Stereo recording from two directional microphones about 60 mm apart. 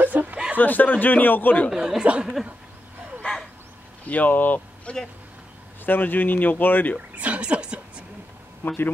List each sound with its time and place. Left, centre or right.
0.0 s chuckle: right
0.6 s a man's voice: left
1.7 s speech: centre
3.2 s a sound: centre
4.0 s speech: left
7.2 s a sound: right
8.6 s speech: left